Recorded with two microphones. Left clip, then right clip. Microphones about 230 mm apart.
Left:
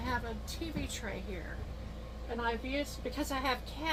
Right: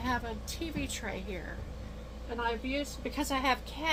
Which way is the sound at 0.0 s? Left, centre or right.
Right.